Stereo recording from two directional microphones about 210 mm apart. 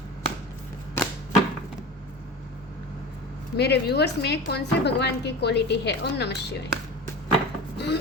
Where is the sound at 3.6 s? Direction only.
50° left (ahead or behind).